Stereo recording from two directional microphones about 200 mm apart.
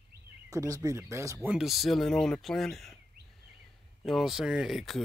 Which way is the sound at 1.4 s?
Centre (ahead or behind).